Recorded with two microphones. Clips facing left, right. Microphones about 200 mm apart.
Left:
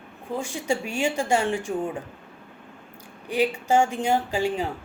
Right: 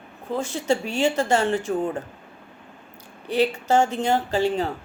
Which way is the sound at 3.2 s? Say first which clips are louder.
Right 2 dB; 10° left (ahead or behind).